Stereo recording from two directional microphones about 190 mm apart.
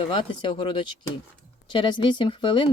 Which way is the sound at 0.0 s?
25° left (ahead or behind).